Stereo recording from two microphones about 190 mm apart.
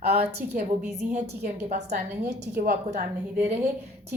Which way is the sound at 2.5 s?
45° right (ahead or behind).